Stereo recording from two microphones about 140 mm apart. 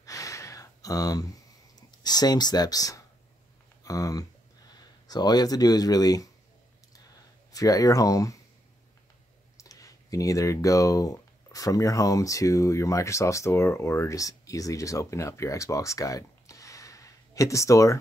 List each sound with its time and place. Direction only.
0.0 s a sound: 25° left (ahead or behind)
3.8 s speech: 25° left (ahead or behind)
7.5 s speech: 25° left (ahead or behind)
9.6 s speech: 25° left (ahead or behind)